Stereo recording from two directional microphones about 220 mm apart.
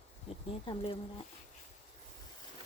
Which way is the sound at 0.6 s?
20° left (ahead or behind).